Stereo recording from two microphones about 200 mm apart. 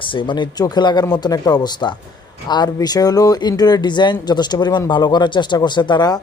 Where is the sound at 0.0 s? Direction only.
25° left (ahead or behind).